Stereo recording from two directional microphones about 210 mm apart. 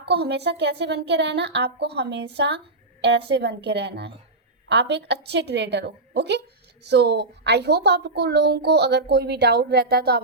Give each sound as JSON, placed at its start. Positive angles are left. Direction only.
{"t": 0.0, "sound": "a woman's voice", "side_deg": -50}